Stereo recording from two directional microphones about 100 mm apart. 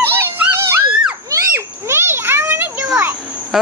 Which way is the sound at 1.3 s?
25° right (ahead or behind).